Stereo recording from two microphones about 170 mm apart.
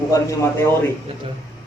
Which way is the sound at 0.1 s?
15° left (ahead or behind).